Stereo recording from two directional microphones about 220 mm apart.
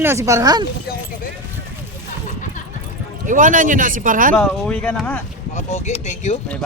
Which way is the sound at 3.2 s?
35° right (ahead or behind).